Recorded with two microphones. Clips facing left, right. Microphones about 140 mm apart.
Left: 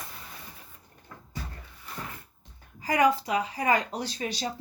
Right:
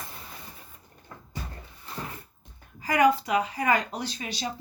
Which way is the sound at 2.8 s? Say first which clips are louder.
Right 2 dB; 35° left (ahead or behind).